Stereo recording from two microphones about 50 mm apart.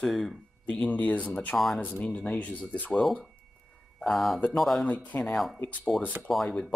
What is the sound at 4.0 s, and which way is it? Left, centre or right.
Speech, centre.